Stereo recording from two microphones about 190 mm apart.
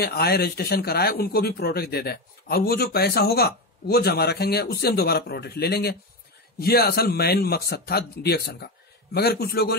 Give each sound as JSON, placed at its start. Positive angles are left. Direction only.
{"t": 0.0, "sound": "speech", "side_deg": 55}